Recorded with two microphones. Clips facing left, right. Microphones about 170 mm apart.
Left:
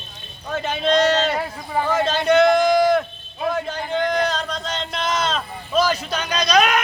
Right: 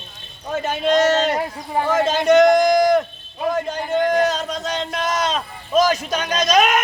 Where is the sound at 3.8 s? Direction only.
10° right (ahead or behind).